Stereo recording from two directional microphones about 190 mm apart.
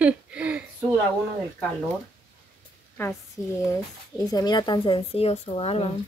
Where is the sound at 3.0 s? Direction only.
15° left (ahead or behind); by 5.9 s 30° left (ahead or behind).